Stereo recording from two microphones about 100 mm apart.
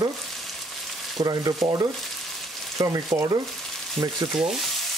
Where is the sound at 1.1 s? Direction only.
40° right (ahead or behind).